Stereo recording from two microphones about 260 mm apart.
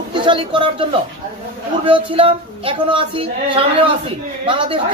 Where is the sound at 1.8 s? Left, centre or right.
Right.